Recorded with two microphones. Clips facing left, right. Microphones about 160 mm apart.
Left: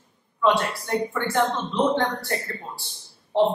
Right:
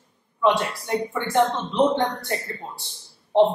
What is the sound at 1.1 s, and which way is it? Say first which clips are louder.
A man's voice: right 5 dB; 20° right (ahead or behind).